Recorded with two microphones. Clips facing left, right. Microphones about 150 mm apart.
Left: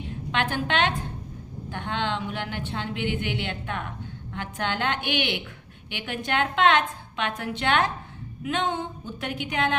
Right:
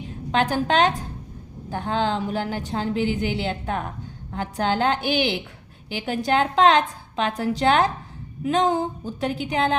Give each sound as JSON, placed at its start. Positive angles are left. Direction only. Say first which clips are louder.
{"t": 0.3, "sound": "a woman's voice", "louder": "right 6 dB", "side_deg": -35}